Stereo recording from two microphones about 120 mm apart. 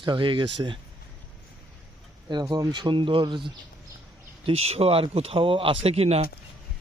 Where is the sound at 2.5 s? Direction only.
35° right (ahead or behind).